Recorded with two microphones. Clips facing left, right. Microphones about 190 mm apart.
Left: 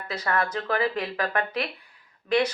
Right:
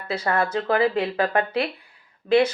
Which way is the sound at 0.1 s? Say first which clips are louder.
Right 4 dB; 30° right (ahead or behind).